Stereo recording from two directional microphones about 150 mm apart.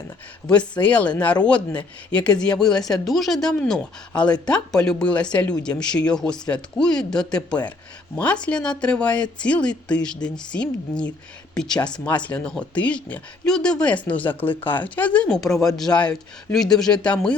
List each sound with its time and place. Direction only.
0.4 s speech: 5° left (ahead or behind)